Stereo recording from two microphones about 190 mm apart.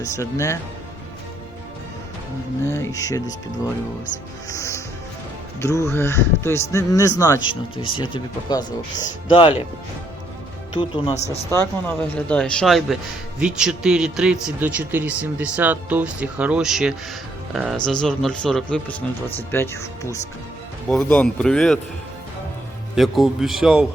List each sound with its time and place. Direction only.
0.0 s speech: 15° left (ahead or behind)
2.6 s speech: 15° left (ahead or behind)
4.4 s speech: 15° left (ahead or behind)
7.4 s speech: 90° left
7.9 s speech: 25° left (ahead or behind)
10.8 s speech: 25° left (ahead or behind)
11.5 s speech: 10° left (ahead or behind)
23.0 s speech: centre (ahead or behind)